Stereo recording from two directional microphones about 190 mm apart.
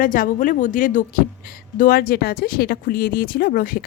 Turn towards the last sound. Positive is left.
turn(degrees=50)  # may be behind; listen again after turning